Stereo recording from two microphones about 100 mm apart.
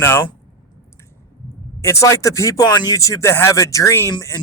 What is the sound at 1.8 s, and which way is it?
A man's voice, 30° left (ahead or behind).